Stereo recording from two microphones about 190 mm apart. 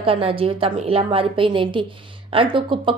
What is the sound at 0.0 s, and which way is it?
Speech, 30° right (ahead or behind).